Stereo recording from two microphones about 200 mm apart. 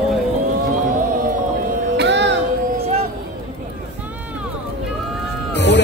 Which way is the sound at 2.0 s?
60° right (ahead or behind).